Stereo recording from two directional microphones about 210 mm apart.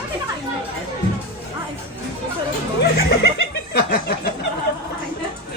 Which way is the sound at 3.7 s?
50° left (ahead or behind).